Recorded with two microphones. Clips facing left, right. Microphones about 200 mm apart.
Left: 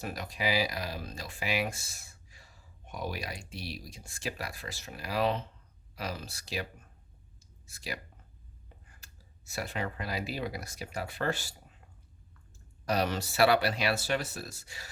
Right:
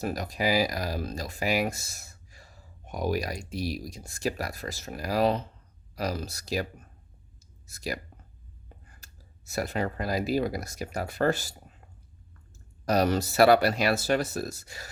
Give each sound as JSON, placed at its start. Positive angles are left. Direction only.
{"t": 0.0, "sound": "speech", "side_deg": -40}
{"t": 12.8, "sound": "speech", "side_deg": -40}